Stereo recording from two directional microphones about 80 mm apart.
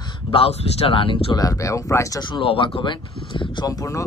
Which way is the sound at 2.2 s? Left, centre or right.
Left.